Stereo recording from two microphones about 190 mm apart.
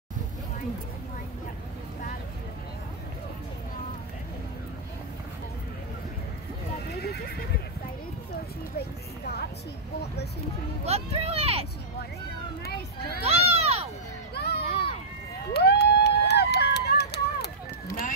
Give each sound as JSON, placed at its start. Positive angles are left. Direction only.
{"t": 7.0, "sound": "neigh", "side_deg": 55}
{"t": 8.7, "sound": "a sound", "side_deg": 55}
{"t": 10.9, "sound": "vehicle", "side_deg": -35}
{"t": 13.2, "sound": "crowd", "side_deg": -35}
{"t": 14.3, "sound": "a sound", "side_deg": 60}
{"t": 15.5, "sound": "run", "side_deg": 60}